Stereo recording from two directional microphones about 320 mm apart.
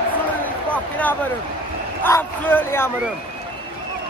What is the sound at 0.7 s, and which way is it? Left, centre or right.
Speech, centre.